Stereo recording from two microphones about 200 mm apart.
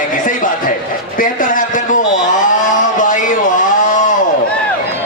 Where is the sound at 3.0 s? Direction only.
40° left (ahead or behind).